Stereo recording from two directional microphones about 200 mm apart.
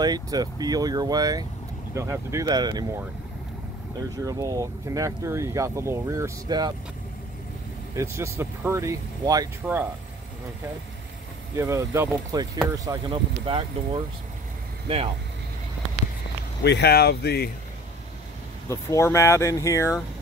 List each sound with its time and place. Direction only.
0.0 s speech: 20° right (ahead or behind)
4.2 s speech: 15° right (ahead or behind)
7.9 s speech: 15° right (ahead or behind)
11.5 s speech: 15° right (ahead or behind)
16.6 s speech: 55° left (ahead or behind)
18.7 s speech: 15° left (ahead or behind)